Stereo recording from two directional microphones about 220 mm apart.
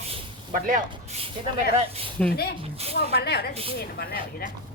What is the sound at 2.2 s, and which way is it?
Speech, 5° left (ahead or behind).